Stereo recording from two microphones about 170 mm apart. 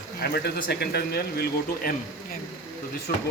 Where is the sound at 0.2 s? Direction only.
65° left (ahead or behind).